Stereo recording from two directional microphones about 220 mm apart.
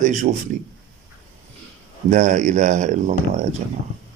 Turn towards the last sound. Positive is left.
turn(degrees=-35)  # may be behind; listen again after turning